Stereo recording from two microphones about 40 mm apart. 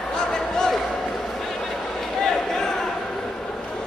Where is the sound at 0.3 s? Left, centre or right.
Centre.